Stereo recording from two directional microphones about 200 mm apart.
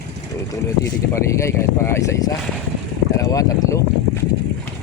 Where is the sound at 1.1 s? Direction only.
15° left (ahead or behind).